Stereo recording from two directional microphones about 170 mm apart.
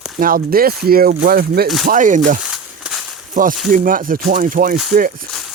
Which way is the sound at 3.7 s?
55° right (ahead or behind).